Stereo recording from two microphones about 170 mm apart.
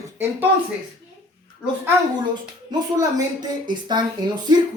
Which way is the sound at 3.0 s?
25° right (ahead or behind).